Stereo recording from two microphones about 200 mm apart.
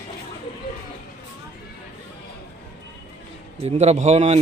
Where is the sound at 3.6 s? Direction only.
35° right (ahead or behind).